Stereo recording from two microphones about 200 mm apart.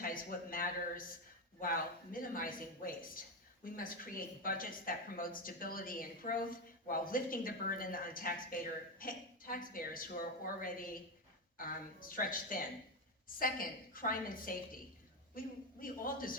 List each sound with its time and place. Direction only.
0.0 s a woman's voice: 45° left (ahead or behind)